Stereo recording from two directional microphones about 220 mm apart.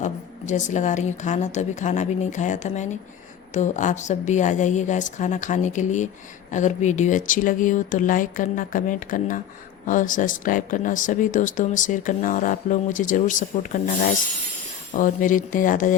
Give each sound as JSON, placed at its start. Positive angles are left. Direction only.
{"t": 0.0, "sound": "speech", "side_deg": 35}